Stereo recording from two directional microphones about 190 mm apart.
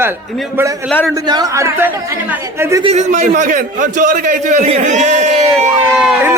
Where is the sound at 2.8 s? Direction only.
35° right (ahead or behind).